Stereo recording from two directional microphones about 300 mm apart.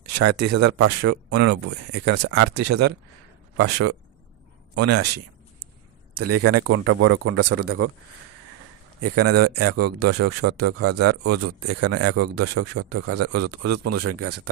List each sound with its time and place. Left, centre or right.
0.1 s speech: right
2.6 s speech: right
4.7 s a sound: right
6.1 s speech: right
9.0 s speech: right